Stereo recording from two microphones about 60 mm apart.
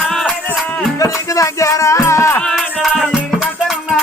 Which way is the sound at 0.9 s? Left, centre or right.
Left.